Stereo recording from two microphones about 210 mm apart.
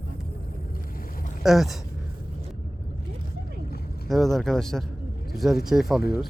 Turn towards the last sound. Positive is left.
turn(degrees=0)  # may be behind; listen again after turning